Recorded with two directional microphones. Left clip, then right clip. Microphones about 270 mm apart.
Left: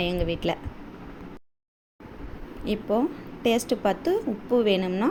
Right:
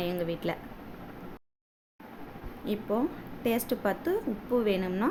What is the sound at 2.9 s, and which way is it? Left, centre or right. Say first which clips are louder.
A woman's voice: left 5 dB; centre.